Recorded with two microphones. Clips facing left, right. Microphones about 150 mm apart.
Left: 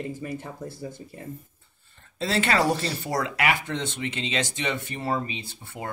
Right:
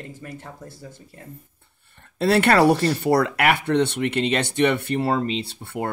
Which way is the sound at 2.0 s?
60° right (ahead or behind).